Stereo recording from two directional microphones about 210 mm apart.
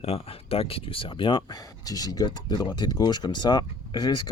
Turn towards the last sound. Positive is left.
turn(degrees=20)  # may be behind; listen again after turning